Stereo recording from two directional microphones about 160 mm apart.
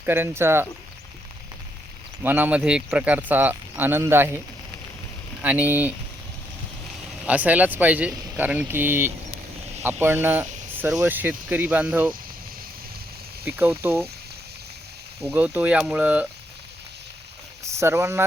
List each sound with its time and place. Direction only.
0.0 s speech: 15° right (ahead or behind)
2.2 s speech: 10° right (ahead or behind)
5.4 s speech: 10° right (ahead or behind)
7.3 s speech: 10° right (ahead or behind)
13.6 s speech: 15° right (ahead or behind)
15.3 s speech: 10° right (ahead or behind)
17.6 s speech: 15° right (ahead or behind)